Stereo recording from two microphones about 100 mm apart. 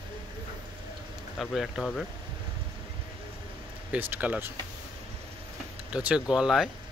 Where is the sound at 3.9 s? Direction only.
15° right (ahead or behind).